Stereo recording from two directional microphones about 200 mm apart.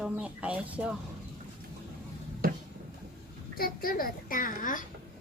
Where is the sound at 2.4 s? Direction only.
45° right (ahead or behind).